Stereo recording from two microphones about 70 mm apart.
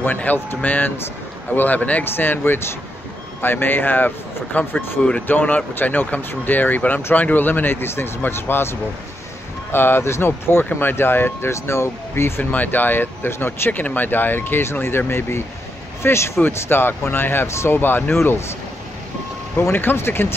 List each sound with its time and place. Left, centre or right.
0.0 s speech: left
19.7 s speech: left